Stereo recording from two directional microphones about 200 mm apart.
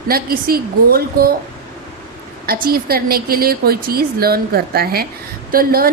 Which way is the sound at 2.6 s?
50° right (ahead or behind).